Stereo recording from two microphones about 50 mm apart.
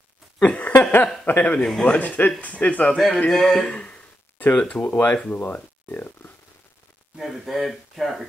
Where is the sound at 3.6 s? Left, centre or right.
Left.